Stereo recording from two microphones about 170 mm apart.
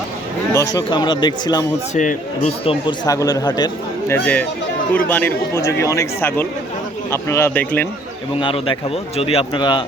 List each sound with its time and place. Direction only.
0.5 s speech: 20° left (ahead or behind)
2.0 s speech: 45° left (ahead or behind)
2.6 s speech: 25° left (ahead or behind)
4.1 s speech: 10° left (ahead or behind)
8.4 s speech: 30° left (ahead or behind)